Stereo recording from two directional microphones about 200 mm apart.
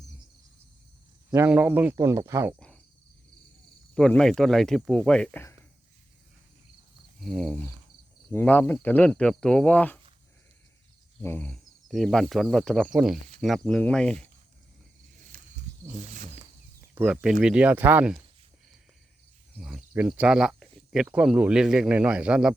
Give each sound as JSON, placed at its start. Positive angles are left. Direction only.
{"t": 1.3, "sound": "speech", "side_deg": -10}
{"t": 2.6, "sound": "cricket", "side_deg": 5}
{"t": 3.9, "sound": "speech", "side_deg": 5}
{"t": 7.2, "sound": "speech", "side_deg": 0}
{"t": 11.2, "sound": "speech", "side_deg": 10}
{"t": 15.3, "sound": "wild animals", "side_deg": -45}
{"t": 16.9, "sound": "speech", "side_deg": -5}
{"t": 19.5, "sound": "speech", "side_deg": -5}